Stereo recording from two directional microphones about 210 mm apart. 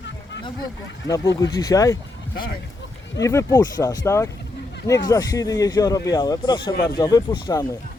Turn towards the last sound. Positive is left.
turn(degrees=20)  # may be behind; listen again after turning